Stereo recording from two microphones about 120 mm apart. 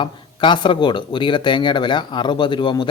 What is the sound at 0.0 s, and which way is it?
Speech, 40° left (ahead or behind).